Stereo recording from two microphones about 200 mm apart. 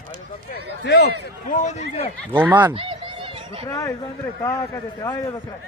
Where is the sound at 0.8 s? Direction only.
60° left (ahead or behind).